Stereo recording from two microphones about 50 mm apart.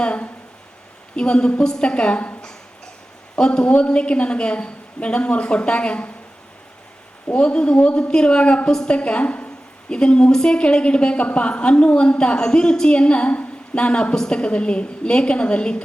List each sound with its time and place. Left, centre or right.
0.0 s a sound: left
1.1 s a woman's voice: centre
3.3 s a woman's voice: centre
7.3 s a woman's voice: left